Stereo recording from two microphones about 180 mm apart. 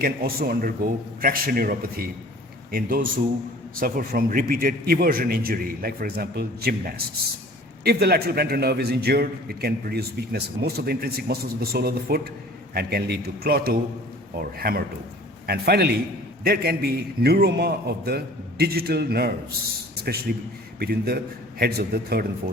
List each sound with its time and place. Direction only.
0.0 s a man's voice: 55° right (ahead or behind)